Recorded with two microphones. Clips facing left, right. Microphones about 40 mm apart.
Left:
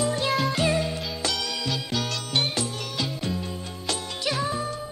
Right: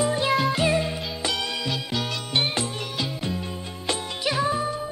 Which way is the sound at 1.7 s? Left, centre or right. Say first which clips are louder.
Even; centre.